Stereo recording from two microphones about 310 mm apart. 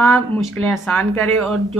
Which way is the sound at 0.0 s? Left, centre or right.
Centre.